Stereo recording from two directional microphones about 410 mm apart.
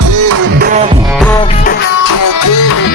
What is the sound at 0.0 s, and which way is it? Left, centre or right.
Music, right.